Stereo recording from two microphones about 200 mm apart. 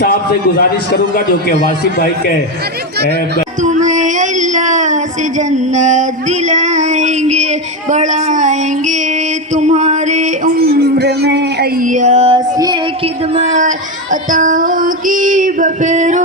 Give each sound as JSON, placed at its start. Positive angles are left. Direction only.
{"t": 0.0, "sound": "a man's voice", "side_deg": 50}
{"t": 3.6, "sound": "speech", "side_deg": -35}
{"t": 5.4, "sound": "a sound", "side_deg": -35}
{"t": 9.6, "sound": "music", "side_deg": -35}
{"t": 11.8, "sound": "music", "side_deg": -40}
{"t": 13.3, "sound": "child singing", "side_deg": -35}